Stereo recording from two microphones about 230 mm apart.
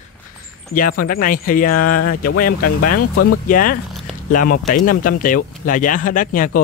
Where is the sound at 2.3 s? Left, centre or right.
Left.